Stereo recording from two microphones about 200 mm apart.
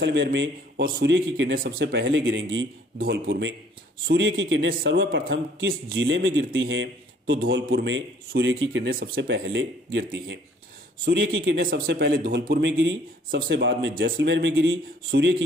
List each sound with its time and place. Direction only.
0.0 s speech: 60° right (ahead or behind)
3.0 s a man's voice: 50° right (ahead or behind); by 11.5 s 75° right (ahead or behind)
11.6 s speech: 50° right (ahead or behind)